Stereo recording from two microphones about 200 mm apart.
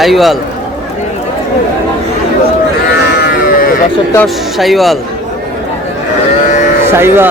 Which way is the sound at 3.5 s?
45° left (ahead or behind).